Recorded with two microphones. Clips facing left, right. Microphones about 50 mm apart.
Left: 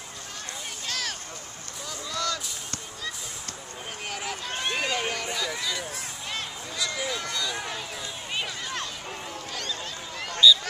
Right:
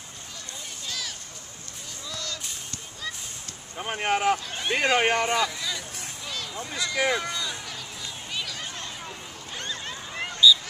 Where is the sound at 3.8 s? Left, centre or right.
Right.